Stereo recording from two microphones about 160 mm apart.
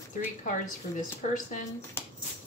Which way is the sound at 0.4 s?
55° left (ahead or behind).